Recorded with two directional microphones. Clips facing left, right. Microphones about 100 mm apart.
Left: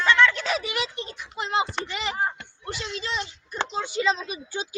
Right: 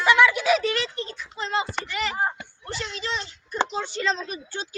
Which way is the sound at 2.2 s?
15° right (ahead or behind).